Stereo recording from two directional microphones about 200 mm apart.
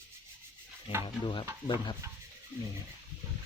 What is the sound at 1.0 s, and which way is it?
Speech, 25° left (ahead or behind).